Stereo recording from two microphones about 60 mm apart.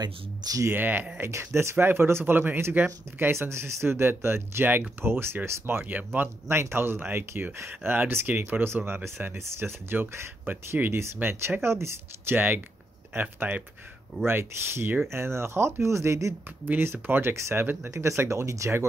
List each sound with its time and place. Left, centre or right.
0.7 s speech: right
1.3 s speech: right
12.4 s speech: right
16.6 s speech: right